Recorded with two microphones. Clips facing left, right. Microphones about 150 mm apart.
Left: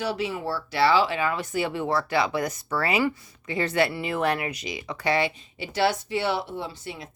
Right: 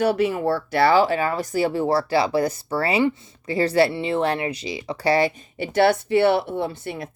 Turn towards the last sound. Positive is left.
turn(degrees=-55)  # may be behind; listen again after turning